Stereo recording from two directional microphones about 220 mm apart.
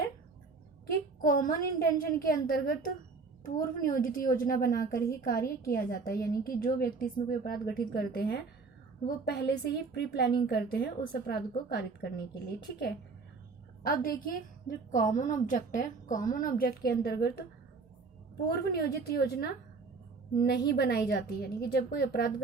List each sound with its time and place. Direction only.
0.9 s a woman's voice: 40° left (ahead or behind)
13.8 s a woman's voice: 40° left (ahead or behind)
18.5 s a woman's voice: 45° left (ahead or behind)